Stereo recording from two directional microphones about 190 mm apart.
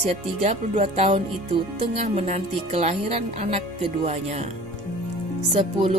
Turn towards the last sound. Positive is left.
turn(degrees=-30)  # may be behind; listen again after turning